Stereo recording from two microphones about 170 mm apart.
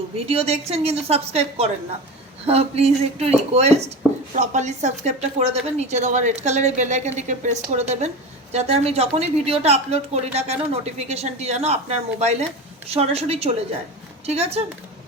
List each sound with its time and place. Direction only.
0.3 s a woman's voice: 35° right (ahead or behind)